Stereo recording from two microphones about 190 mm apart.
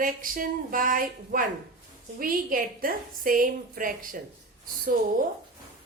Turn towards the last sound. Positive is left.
turn(degrees=-45)  # may be behind; listen again after turning